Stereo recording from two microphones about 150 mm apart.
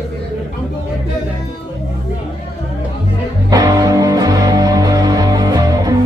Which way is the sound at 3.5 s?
25° right (ahead or behind).